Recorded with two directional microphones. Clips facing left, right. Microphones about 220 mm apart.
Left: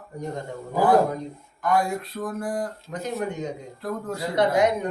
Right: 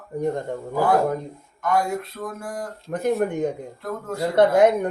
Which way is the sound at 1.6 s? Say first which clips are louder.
Right 1 dB; centre (ahead or behind).